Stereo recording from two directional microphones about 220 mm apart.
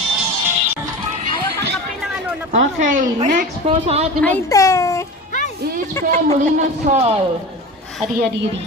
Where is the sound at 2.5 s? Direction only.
35° right (ahead or behind).